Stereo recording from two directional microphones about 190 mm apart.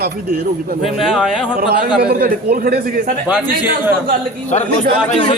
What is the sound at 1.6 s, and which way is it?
A man's voice, 50° right (ahead or behind).